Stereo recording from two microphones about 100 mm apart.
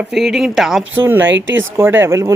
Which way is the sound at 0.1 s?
5° right (ahead or behind).